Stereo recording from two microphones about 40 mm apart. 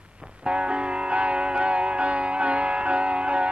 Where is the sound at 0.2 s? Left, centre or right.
Right.